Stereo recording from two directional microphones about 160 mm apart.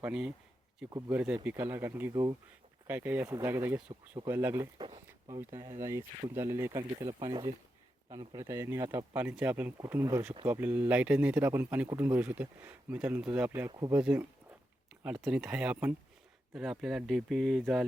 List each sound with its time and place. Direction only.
0.0 s speech: 5° right (ahead or behind)
0.9 s speech: 20° right (ahead or behind)
1.1 s speech: 10° right (ahead or behind)
13.7 s speech: 25° right (ahead or behind)
14.0 s speech: 10° right (ahead or behind)